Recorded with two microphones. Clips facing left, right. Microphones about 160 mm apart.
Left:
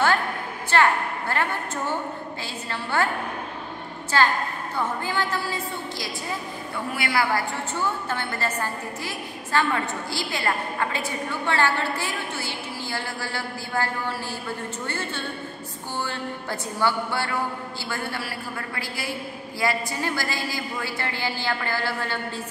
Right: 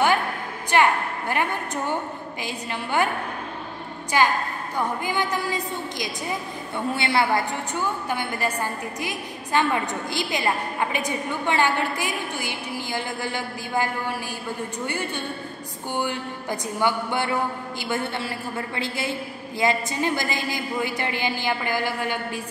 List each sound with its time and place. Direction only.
0.7 s a woman's voice: 15° right (ahead or behind)
4.1 s a woman's voice: 15° right (ahead or behind)